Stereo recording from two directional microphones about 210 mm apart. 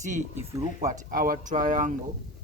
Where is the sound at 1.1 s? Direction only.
40° right (ahead or behind).